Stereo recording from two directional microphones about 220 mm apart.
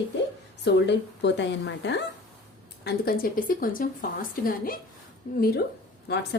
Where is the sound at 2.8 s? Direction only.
40° left (ahead or behind).